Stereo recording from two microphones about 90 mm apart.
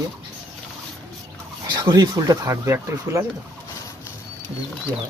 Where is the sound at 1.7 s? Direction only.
55° right (ahead or behind).